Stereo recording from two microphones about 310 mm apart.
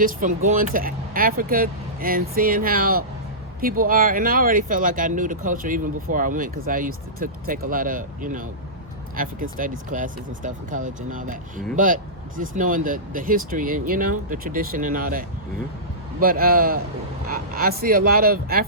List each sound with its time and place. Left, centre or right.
0.0 s speech: right